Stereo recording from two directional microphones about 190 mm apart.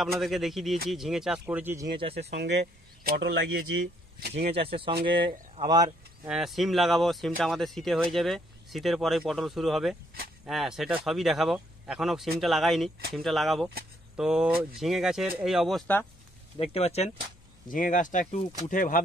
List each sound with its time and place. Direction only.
0.0 s speech: centre (ahead or behind)
2.0 s speech: 30° right (ahead or behind)
2.3 s speech: 65° right (ahead or behind)
3.7 s speech: 60° right (ahead or behind)
4.4 s speech: 30° right (ahead or behind)
6.2 s speech: 5° right (ahead or behind)
16.5 s speech: 30° left (ahead or behind)
17.6 s speech: 45° left (ahead or behind)